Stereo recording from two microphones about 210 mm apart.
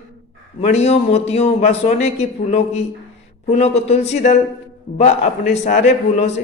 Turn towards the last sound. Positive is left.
turn(degrees=30)  # may be behind; listen again after turning